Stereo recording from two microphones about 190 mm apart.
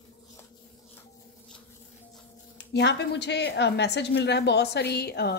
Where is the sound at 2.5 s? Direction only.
65° left (ahead or behind).